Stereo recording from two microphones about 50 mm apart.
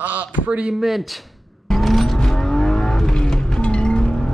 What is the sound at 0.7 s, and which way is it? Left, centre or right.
Speech, centre.